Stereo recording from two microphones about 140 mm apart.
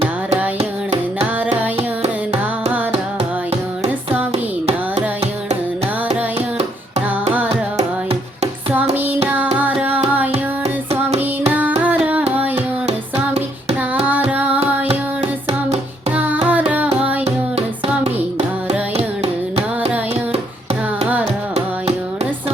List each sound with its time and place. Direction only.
2.0 s carnatic music: 50° right (ahead or behind)
4.3 s carnatic music: 50° right (ahead or behind)
6.6 s music: 50° right (ahead or behind)
9.6 s music: 10° right (ahead or behind)
11.8 s music: 10° right (ahead or behind)
13.3 s child singing: 50° right (ahead or behind)
14.0 s singing: 10° right (ahead or behind)
16.1 s music: 10° right (ahead or behind)
18.0 s carnatic music: 50° right (ahead or behind)